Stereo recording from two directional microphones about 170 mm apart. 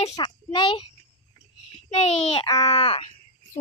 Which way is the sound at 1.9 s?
40° left (ahead or behind).